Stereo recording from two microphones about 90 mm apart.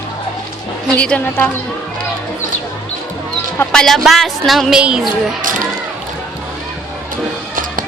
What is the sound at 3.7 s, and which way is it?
A woman's voice, 5° left (ahead or behind).